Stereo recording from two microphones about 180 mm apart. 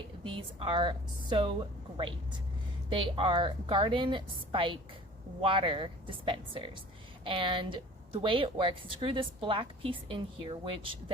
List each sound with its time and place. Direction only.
0.3 s a woman's voice: 30° right (ahead or behind)